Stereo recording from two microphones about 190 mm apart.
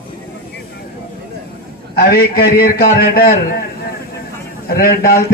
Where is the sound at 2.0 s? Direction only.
50° left (ahead or behind).